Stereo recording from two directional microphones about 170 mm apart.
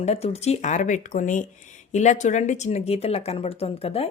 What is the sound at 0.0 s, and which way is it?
Speech, 40° left (ahead or behind).